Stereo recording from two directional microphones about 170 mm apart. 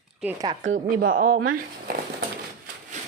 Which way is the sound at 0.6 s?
90° right.